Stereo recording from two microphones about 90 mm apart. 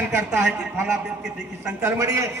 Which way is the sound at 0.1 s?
20° right (ahead or behind).